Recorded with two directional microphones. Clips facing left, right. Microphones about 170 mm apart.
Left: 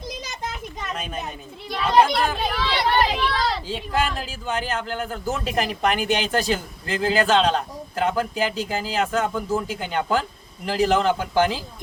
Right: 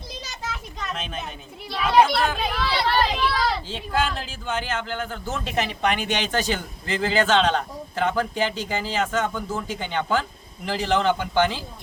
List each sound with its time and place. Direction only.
0.9 s a man's voice: 5° left (ahead or behind)
1.8 s a child's voice: 5° right (ahead or behind)
2.7 s a man's voice: 15° left (ahead or behind)
3.2 s speech: 5° right (ahead or behind)
3.7 s a man's voice: 10° left (ahead or behind)